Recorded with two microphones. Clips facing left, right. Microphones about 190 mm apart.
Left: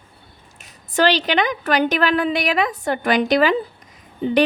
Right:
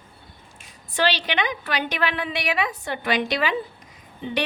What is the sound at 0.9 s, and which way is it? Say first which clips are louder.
A woman's voice: left 6 dB; 45° left (ahead or behind).